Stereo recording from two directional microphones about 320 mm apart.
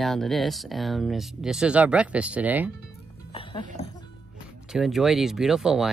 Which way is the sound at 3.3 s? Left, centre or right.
Centre.